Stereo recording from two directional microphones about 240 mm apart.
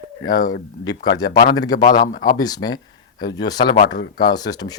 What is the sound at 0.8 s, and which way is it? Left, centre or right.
Speech, centre.